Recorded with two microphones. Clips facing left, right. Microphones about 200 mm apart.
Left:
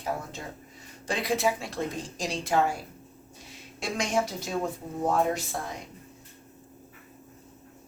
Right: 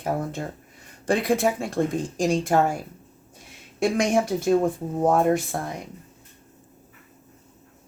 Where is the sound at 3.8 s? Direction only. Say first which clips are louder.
Right 7 dB; 55° right (ahead or behind).